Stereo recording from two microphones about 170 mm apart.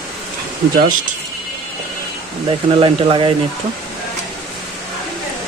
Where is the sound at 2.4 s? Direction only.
30° right (ahead or behind).